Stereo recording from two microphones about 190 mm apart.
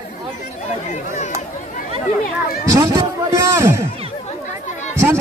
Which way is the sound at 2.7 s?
15° right (ahead or behind).